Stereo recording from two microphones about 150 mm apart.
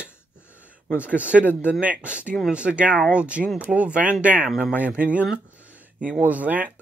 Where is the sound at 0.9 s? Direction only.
10° right (ahead or behind).